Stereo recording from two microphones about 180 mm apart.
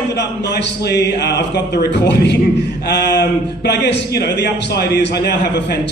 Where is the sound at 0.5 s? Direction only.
65° left (ahead or behind).